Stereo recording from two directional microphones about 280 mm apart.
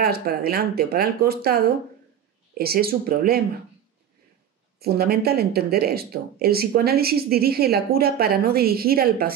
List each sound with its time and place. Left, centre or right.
0.0 s speech: right
4.7 s speech: right